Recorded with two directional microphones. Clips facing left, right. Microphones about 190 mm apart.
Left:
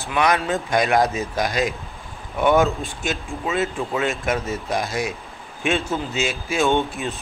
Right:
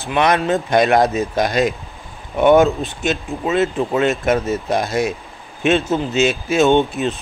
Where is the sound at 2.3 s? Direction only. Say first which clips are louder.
Right 6 dB; 20° right (ahead or behind).